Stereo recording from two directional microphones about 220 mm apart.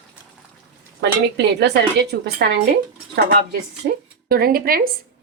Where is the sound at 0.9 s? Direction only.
50° right (ahead or behind).